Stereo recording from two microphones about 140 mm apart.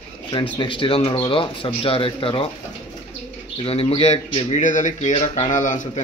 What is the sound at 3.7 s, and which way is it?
Speech, 45° left (ahead or behind).